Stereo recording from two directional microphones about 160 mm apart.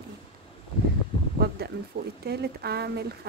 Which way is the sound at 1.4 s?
80° right.